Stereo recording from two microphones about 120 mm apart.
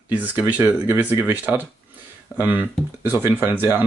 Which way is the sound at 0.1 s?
15° right (ahead or behind).